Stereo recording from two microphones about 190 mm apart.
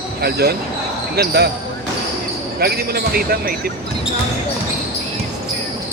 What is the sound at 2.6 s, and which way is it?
Speech, 55° right (ahead or behind).